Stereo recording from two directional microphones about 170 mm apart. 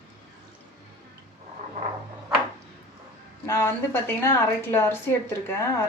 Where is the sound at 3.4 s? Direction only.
15° left (ahead or behind).